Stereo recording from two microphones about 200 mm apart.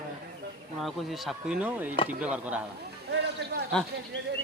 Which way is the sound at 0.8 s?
Centre (ahead or behind).